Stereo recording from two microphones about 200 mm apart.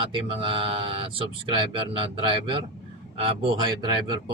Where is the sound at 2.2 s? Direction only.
25° right (ahead or behind).